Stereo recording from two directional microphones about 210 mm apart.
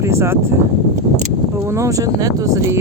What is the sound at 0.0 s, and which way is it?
Speech, 10° right (ahead or behind).